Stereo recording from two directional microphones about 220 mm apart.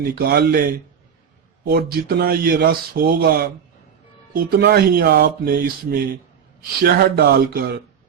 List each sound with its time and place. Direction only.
0.0 s speech: 40° right (ahead or behind)